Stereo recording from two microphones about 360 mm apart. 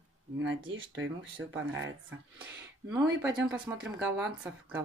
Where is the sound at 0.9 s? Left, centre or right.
Right.